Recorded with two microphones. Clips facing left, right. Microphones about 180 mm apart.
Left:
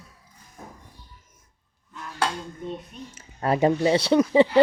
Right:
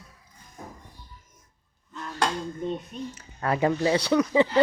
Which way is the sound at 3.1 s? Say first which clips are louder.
Left 4 dB; 25° left (ahead or behind).